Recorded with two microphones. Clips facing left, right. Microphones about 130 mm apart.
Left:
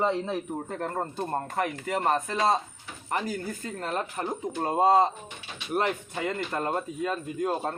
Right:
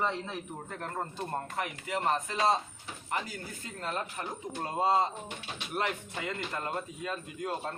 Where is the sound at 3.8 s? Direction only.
45° left (ahead or behind).